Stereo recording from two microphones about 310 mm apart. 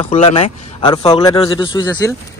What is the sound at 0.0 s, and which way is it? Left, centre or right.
A man's voice, centre.